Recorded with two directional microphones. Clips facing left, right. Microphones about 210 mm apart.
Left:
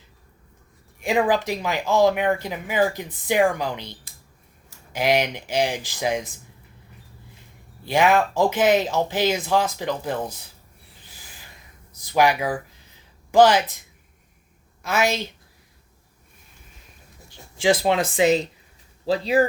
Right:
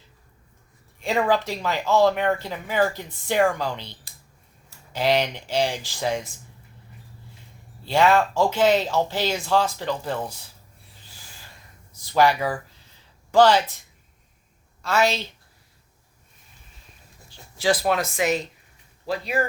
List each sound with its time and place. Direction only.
0.9 s speech: 15° left (ahead or behind)
7.9 s speech: 15° left (ahead or behind)
12.0 s speech: 15° left (ahead or behind)
14.8 s speech: 15° left (ahead or behind)
17.2 s speech: 25° left (ahead or behind)